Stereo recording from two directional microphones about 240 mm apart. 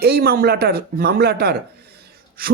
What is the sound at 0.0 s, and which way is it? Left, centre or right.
Speech, right.